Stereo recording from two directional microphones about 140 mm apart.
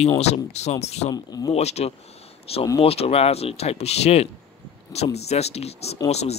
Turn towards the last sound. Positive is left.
turn(degrees=50)  # may be behind; listen again after turning